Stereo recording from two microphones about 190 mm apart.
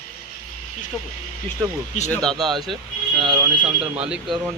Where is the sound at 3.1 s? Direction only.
20° right (ahead or behind).